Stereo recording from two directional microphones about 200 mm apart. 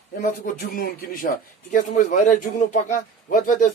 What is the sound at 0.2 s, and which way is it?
A man's voice, 45° left (ahead or behind).